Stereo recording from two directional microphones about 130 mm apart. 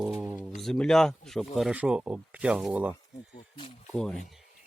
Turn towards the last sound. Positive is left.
turn(degrees=5)  # may be behind; listen again after turning